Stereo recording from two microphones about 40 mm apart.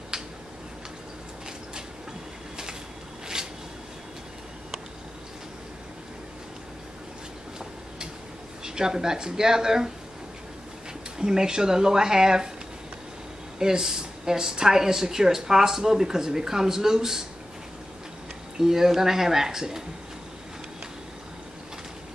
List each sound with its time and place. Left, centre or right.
3.3 s a sound: centre
8.6 s speech: centre
11.1 s speech: centre
13.6 s speech: centre
18.6 s speech: centre